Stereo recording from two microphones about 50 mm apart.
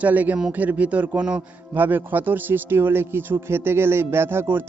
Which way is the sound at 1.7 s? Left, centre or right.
Right.